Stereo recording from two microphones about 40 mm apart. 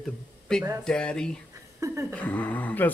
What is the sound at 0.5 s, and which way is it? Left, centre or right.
Speech, centre.